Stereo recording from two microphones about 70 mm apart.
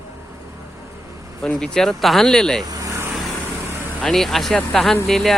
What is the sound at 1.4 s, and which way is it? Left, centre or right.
Speech, centre.